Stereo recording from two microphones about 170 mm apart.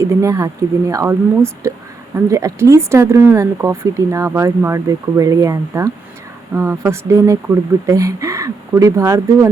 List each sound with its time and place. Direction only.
0.2 s speech: 20° right (ahead or behind)